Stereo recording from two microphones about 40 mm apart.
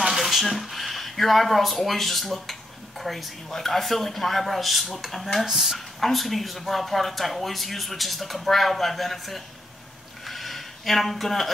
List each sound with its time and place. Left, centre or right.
0.2 s speech: centre
5.9 s speech: centre
10.2 s a sound: centre